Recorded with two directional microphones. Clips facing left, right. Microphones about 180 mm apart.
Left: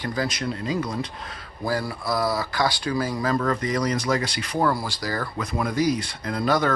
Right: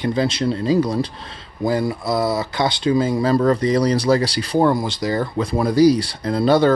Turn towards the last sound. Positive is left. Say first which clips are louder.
# right 7 dB
turn(degrees=-30)  # may be behind; listen again after turning